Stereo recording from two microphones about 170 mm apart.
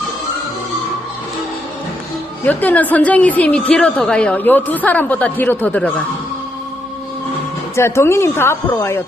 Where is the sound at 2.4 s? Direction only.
10° left (ahead or behind).